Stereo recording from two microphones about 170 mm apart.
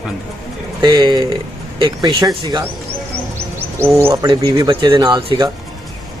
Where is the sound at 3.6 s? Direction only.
15° right (ahead or behind).